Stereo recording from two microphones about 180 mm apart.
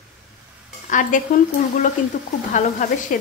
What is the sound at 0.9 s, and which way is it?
A woman's voice, 45° left (ahead or behind).